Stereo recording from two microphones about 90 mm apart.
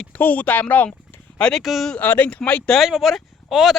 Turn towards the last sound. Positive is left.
turn(degrees=-5)  # may be behind; listen again after turning